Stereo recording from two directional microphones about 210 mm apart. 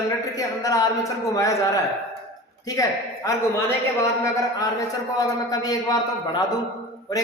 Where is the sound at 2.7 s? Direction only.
15° left (ahead or behind).